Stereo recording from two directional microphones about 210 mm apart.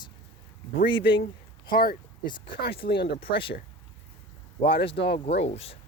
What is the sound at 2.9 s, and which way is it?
Speech, 50° left (ahead or behind).